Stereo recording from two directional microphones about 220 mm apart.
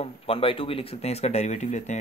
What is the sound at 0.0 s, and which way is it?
Speech, 25° left (ahead or behind).